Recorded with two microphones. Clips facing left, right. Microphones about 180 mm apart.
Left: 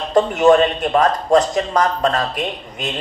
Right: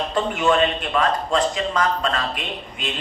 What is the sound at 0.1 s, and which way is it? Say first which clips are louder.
A man's voice: left 9 dB; 40° left (ahead or behind).